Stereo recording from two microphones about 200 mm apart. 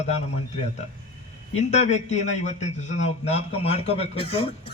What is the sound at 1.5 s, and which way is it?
A man's voice, 35° left (ahead or behind).